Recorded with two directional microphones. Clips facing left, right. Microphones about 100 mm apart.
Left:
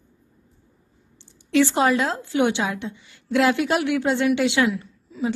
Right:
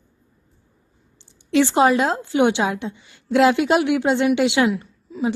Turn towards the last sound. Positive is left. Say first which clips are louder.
# right 2 dB
turn(degrees=-20)  # may be behind; listen again after turning